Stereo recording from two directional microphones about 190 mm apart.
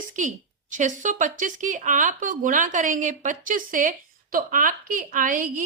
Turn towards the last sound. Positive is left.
turn(degrees=-45)  # may be behind; listen again after turning